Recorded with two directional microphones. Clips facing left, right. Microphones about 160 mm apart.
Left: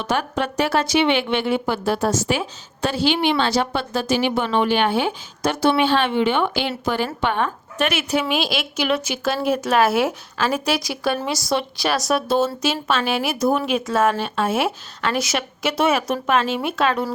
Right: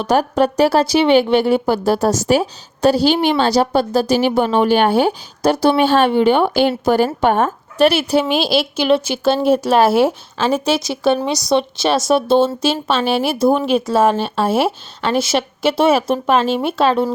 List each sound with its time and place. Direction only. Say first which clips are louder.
0.0 s a woman's voice: right 8 dB; 40° right (ahead or behind)